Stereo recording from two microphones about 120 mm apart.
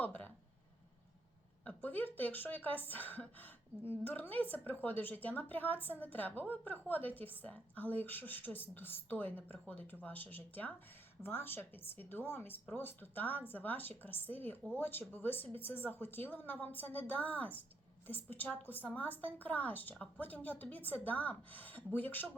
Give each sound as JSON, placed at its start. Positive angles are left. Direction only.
{"t": 0.0, "sound": "speech", "side_deg": 15}
{"t": 1.6, "sound": "speech", "side_deg": 15}